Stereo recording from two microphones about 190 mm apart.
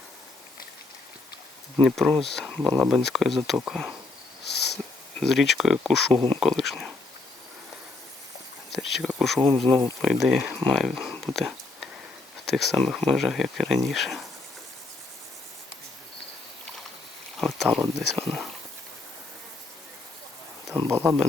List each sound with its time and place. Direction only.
1.8 s speech: centre (ahead or behind)
4.5 s wheeze: 60° left (ahead or behind)
5.2 s speech: centre (ahead or behind)
6.1 s speech: 30° right (ahead or behind)
6.4 s speech: centre (ahead or behind)
9.0 s speech: 5° right (ahead or behind)
17.3 s speech: centre (ahead or behind)
20.9 s speech: 15° right (ahead or behind)